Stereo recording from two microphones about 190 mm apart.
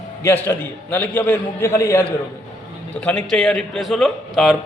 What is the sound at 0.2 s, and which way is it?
A man's voice, 15° left (ahead or behind).